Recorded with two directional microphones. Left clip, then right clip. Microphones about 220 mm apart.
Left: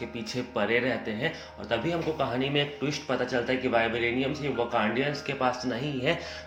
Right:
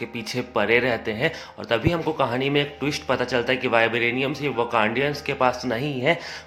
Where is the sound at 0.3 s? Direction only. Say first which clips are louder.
Right 7 dB; 30° right (ahead or behind).